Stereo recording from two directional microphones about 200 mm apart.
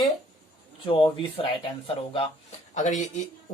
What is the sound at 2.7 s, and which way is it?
Speech, 35° left (ahead or behind).